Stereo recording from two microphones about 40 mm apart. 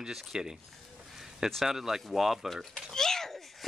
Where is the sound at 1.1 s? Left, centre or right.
Centre.